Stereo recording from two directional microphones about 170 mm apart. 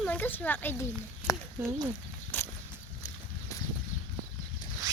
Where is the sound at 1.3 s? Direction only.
20° left (ahead or behind).